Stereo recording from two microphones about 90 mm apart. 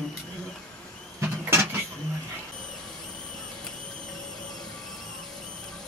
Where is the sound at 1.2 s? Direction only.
25° right (ahead or behind).